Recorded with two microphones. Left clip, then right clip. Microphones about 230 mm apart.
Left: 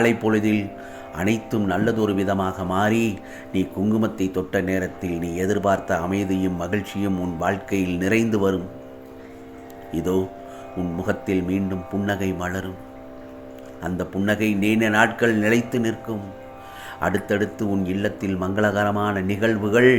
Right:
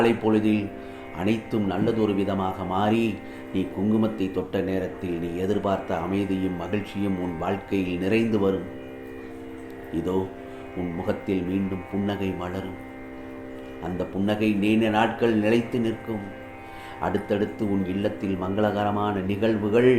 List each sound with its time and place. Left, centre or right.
0.0 s speech: left
9.9 s speech: left
13.8 s speech: left